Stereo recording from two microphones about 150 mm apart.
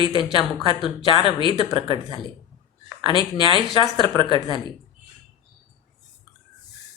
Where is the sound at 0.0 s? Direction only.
35° left (ahead or behind).